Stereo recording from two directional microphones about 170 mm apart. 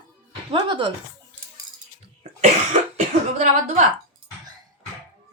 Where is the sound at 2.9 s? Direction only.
40° right (ahead or behind).